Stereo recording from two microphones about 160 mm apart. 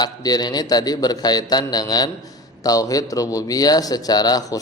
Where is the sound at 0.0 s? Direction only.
25° left (ahead or behind).